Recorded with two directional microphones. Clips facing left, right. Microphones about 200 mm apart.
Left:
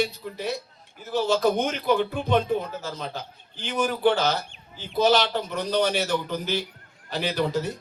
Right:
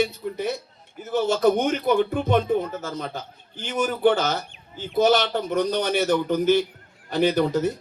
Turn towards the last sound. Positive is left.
turn(degrees=-50)  # may be behind; listen again after turning